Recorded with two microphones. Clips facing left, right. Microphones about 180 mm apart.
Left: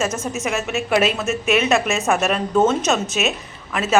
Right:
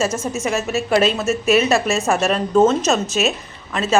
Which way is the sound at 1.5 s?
35° right (ahead or behind).